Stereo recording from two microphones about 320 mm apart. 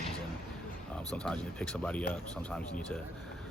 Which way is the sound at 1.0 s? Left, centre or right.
Centre.